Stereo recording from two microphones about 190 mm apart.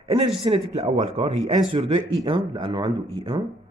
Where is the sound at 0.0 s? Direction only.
30° right (ahead or behind).